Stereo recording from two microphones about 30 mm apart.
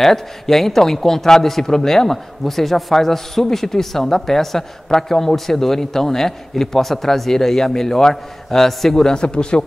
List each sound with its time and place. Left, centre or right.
0.0 s a man's voice: centre
9.0 s speech: left